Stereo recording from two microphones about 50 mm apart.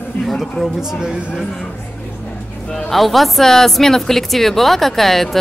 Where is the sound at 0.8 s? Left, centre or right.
Centre.